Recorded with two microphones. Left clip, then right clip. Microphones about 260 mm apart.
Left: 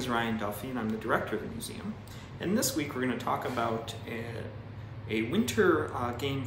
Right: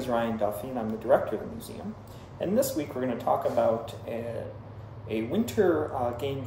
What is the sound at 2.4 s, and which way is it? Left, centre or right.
Speech, centre.